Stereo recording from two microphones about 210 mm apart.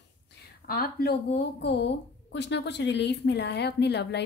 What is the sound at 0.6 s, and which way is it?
A woman's voice, 45° left (ahead or behind).